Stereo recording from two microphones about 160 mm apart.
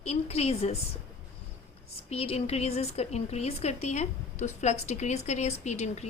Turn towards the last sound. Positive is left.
turn(degrees=45)  # may be behind; listen again after turning